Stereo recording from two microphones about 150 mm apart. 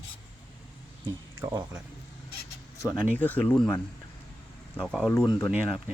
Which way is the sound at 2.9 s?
10° left (ahead or behind).